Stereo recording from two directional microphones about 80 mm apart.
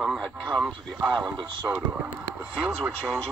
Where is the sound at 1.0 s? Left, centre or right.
Centre.